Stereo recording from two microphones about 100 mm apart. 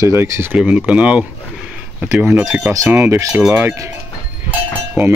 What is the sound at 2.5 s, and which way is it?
Speech, 20° right (ahead or behind).